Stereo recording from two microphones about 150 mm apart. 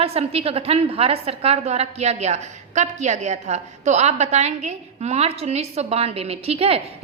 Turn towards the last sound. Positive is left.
turn(degrees=-40)  # may be behind; listen again after turning